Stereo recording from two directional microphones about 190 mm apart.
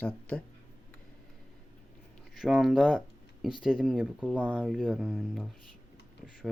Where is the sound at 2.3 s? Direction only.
Centre (ahead or behind).